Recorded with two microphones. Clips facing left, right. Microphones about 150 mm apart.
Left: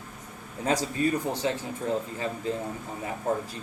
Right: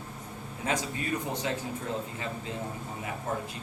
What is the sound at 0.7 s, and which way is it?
Speech, 35° left (ahead or behind).